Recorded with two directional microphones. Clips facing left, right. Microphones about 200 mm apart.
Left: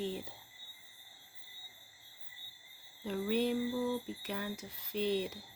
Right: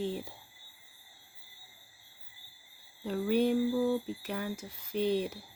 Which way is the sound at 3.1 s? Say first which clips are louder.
Right 5 dB; 50° right (ahead or behind).